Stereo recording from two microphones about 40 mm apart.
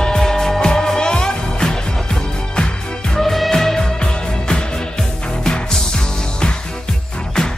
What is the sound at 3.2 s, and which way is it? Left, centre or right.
Music, centre.